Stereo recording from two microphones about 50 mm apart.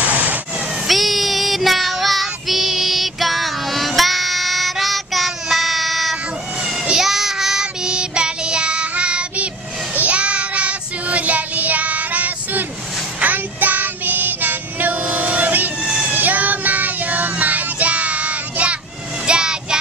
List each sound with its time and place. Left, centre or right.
0.8 s child singing: centre; by 15.7 s right
15.8 s cat: centre
16.1 s child singing: right
19.2 s child singing: centre